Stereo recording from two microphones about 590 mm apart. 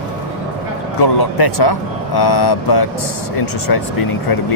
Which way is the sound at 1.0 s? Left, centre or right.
Left.